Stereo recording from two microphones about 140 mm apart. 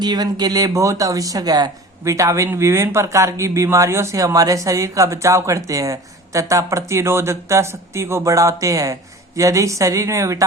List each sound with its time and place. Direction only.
0.0 s speech: 30° right (ahead or behind)